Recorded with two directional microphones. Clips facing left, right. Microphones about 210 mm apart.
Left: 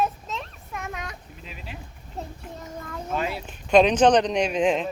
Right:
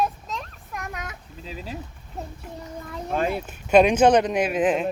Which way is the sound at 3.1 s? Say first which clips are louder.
Right 4 dB; 50° right (ahead or behind).